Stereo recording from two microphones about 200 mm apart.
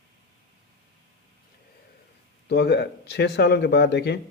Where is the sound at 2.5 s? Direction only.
55° left (ahead or behind).